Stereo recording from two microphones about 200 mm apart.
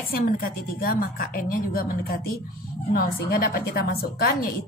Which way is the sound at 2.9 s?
50° left (ahead or behind).